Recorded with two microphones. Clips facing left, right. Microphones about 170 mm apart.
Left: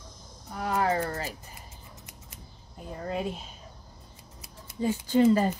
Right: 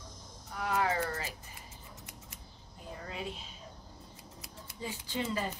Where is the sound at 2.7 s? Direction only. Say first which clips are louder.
Left 10 dB; 50° left (ahead or behind).